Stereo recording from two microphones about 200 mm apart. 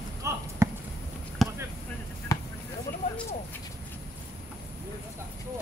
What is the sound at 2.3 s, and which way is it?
Basketball bounce, 15° left (ahead or behind).